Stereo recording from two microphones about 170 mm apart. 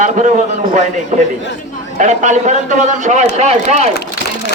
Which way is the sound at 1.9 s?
45° right (ahead or behind).